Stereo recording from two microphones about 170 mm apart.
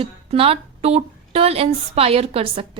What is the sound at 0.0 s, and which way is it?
A woman's voice, 35° right (ahead or behind).